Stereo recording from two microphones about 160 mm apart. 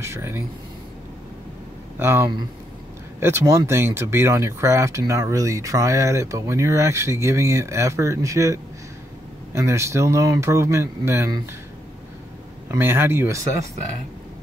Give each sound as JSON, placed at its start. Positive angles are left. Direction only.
{"t": 0.0, "sound": "speech", "side_deg": -15}
{"t": 2.0, "sound": "speech", "side_deg": -15}
{"t": 12.7, "sound": "speech", "side_deg": -15}